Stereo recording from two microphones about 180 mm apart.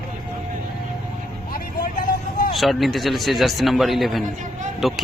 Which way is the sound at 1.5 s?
50° left (ahead or behind).